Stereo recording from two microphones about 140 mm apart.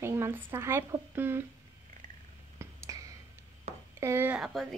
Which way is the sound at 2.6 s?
25° right (ahead or behind).